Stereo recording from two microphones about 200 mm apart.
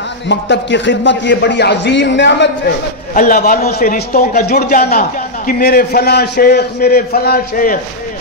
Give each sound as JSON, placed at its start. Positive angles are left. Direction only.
{"t": 0.3, "sound": "a man's voice", "side_deg": 60}
{"t": 3.2, "sound": "a man's voice", "side_deg": 45}